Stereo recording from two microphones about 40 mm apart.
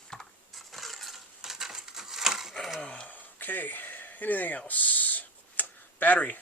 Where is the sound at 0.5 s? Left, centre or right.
Centre.